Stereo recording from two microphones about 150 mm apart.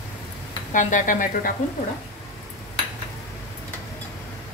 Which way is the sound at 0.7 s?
60° left (ahead or behind).